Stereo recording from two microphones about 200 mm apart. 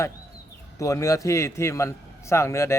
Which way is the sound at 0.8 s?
15° left (ahead or behind).